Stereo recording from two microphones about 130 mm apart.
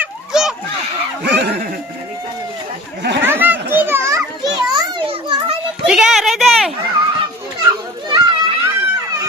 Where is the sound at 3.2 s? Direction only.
15° right (ahead or behind).